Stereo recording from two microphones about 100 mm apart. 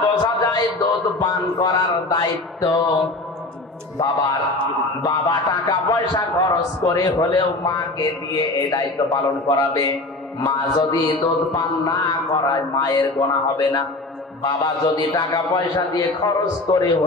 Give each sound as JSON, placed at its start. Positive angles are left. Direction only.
{"t": 0.4, "sound": "music", "side_deg": 40}
{"t": 1.2, "sound": "a sound", "side_deg": 40}
{"t": 4.0, "sound": "speech", "side_deg": 40}